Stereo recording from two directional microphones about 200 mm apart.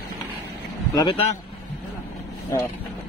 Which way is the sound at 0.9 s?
25° left (ahead or behind).